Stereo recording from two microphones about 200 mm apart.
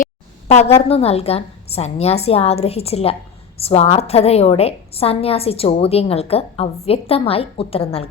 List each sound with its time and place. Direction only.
0.4 s a woman's voice: 30° left (ahead or behind)